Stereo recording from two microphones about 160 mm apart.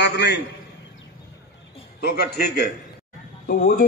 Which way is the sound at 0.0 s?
90° left.